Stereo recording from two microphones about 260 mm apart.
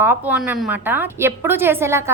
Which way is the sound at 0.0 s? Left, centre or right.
Centre.